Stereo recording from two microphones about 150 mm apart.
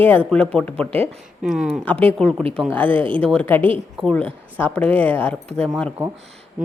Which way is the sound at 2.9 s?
35° right (ahead or behind).